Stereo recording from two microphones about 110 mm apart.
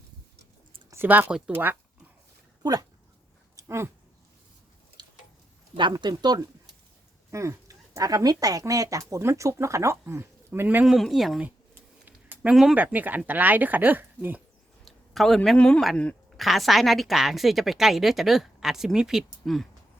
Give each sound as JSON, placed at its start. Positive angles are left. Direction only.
{"t": 0.9, "sound": "speech", "side_deg": -20}
{"t": 3.6, "sound": "speech", "side_deg": -25}
{"t": 5.7, "sound": "speech", "side_deg": -45}
{"t": 7.3, "sound": "speech", "side_deg": -25}
{"t": 10.8, "sound": "a woman's voice", "side_deg": 0}
{"t": 11.4, "sound": "a sound", "side_deg": -15}
{"t": 12.7, "sound": "speech", "side_deg": -15}
{"t": 14.8, "sound": "a sound", "side_deg": 0}
{"t": 15.4, "sound": "a man's voice", "side_deg": 10}